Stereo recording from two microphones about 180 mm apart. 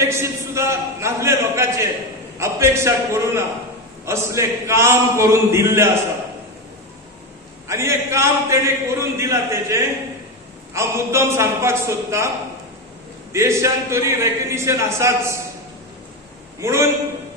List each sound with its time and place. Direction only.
0.0 s a man's voice: 15° right (ahead or behind)
7.6 s a man's voice: 15° right (ahead or behind)
13.3 s a man's voice: 15° right (ahead or behind)
16.5 s a man's voice: 15° right (ahead or behind)